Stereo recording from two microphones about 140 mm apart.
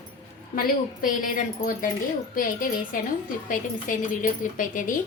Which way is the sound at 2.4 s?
85° left.